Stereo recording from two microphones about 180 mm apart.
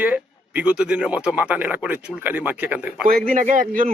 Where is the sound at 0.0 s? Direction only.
10° right (ahead or behind).